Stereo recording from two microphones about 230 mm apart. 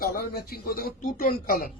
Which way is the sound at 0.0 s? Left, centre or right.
Left.